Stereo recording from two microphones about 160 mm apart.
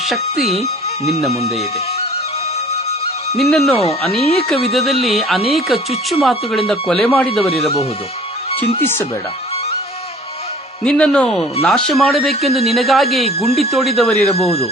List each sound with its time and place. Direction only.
0.0 s speech: centre (ahead or behind)
0.6 s speech: 40° left (ahead or behind)
3.3 s speech: centre (ahead or behind)
3.8 s speech: 40° left (ahead or behind)
4.4 s speech: centre (ahead or behind)
10.8 s speech: 5° left (ahead or behind)
14.2 s speech: 40° left (ahead or behind)